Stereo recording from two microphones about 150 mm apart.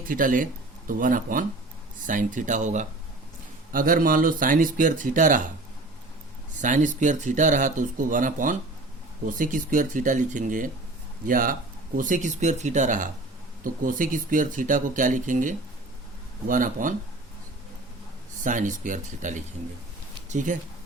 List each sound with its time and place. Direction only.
0.1 s speech: 65° right (ahead or behind)
3.7 s speech: 70° right (ahead or behind)
6.6 s a man's voice: 55° right (ahead or behind)
18.4 s speech: 60° right (ahead or behind)